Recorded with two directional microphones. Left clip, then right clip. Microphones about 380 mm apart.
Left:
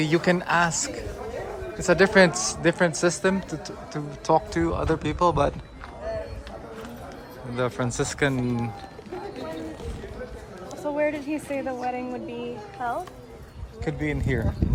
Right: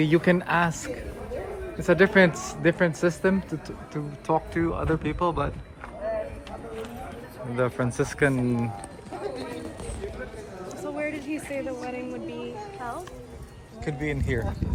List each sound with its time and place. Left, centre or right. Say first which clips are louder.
0.0 s a woman's voice: right 1 dB; centre
7.5 s a woman's voice: right 1 dB; centre
10.9 s music: left 6 dB; left
13.8 s speech: left 2 dB; centre